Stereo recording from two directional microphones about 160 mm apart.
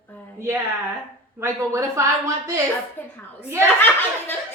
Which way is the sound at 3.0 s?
10° left (ahead or behind).